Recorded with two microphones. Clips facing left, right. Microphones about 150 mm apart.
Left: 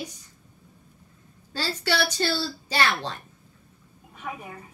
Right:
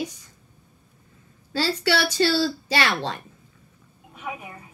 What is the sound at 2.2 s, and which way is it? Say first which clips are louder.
A woman's voice: right 6 dB; 90° right.